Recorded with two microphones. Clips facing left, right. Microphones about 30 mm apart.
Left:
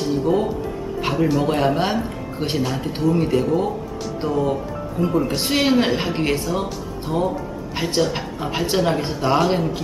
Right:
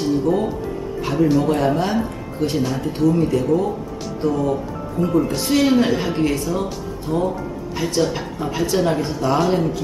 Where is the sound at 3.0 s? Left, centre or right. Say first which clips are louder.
Right 1 dB; left.